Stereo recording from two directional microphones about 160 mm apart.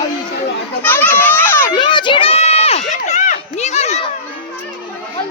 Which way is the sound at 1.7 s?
30° left (ahead or behind).